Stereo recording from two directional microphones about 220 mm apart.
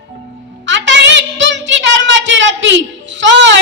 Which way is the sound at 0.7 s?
55° right (ahead or behind).